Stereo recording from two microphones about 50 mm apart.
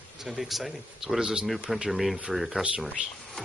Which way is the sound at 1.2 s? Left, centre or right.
Centre.